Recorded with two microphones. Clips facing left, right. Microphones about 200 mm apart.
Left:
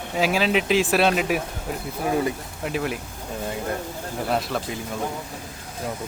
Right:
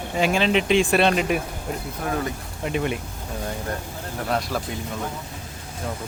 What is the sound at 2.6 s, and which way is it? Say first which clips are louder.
Speech: right 2 dB; centre (ahead or behind).